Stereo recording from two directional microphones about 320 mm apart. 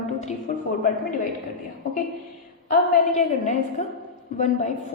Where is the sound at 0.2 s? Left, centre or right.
Left.